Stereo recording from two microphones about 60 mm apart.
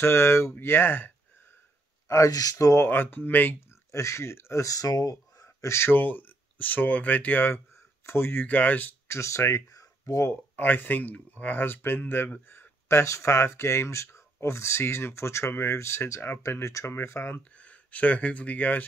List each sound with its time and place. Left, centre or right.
0.0 s speech: left
2.0 s speech: left
2.5 s speech: left
2.9 s speech: left
3.9 s speech: left
4.6 s speech: left
5.8 s speech: left
9.0 s speech: left
10.5 s speech: left
17.4 s speech: left